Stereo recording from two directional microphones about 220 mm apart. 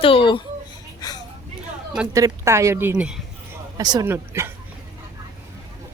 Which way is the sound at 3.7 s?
15° right (ahead or behind).